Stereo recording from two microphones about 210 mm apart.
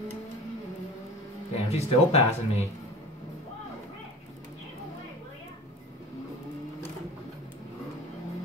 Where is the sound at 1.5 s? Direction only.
30° left (ahead or behind).